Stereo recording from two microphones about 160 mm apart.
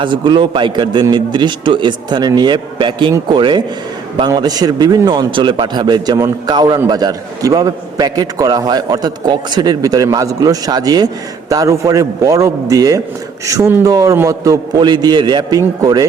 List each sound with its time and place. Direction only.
0.0 s a man's voice: 30° right (ahead or behind)